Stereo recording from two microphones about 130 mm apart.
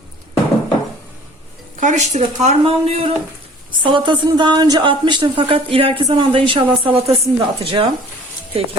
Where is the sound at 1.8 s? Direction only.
70° right (ahead or behind); by 3.1 s 55° right (ahead or behind).